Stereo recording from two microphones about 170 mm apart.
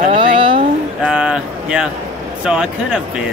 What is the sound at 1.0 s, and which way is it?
Speech, 5° right (ahead or behind).